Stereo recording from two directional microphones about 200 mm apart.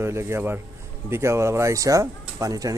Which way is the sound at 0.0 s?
15° right (ahead or behind).